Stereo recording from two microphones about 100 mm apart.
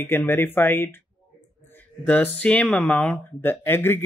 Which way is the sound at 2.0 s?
15° left (ahead or behind).